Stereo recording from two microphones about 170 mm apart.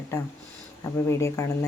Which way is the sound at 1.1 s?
15° left (ahead or behind).